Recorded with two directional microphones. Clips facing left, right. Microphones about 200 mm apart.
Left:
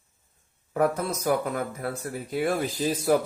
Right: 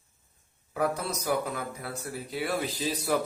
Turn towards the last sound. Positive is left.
turn(degrees=50)  # may be behind; listen again after turning